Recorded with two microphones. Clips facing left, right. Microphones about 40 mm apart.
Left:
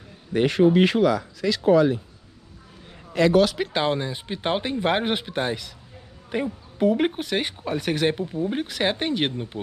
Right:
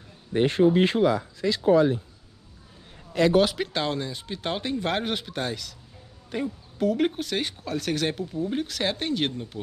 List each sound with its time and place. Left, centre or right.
0.3 s speech: left
3.1 s a sound: left
3.7 s speech: left